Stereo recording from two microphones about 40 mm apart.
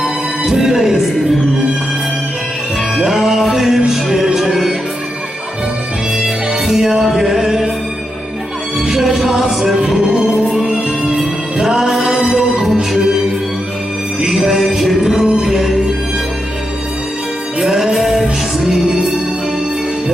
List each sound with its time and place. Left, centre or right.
0.0 s music: centre
3.1 s music: centre
6.2 s music: centre
8.9 s music: centre
14.3 s music: centre
17.6 s music: centre